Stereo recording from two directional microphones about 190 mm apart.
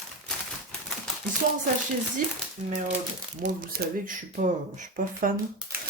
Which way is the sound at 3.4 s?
45° right (ahead or behind).